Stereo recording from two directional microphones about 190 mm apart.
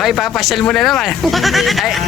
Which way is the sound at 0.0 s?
Centre (ahead or behind).